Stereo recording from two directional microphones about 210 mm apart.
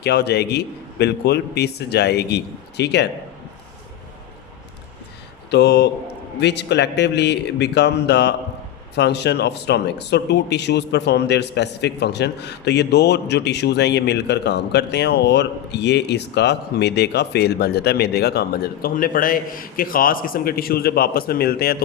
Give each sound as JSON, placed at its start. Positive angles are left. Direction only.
{"t": 0.0, "sound": "speech", "side_deg": 50}
{"t": 5.5, "sound": "speech", "side_deg": 55}